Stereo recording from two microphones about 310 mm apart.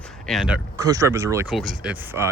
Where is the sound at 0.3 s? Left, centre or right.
Centre.